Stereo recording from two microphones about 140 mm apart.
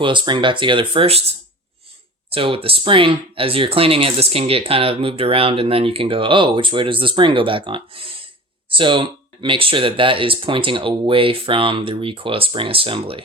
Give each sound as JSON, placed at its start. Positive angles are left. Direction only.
{"t": 0.0, "sound": "speech", "side_deg": -35}
{"t": 2.3, "sound": "speech", "side_deg": -40}